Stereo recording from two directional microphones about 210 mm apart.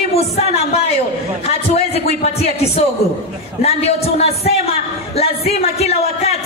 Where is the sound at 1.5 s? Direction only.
30° left (ahead or behind).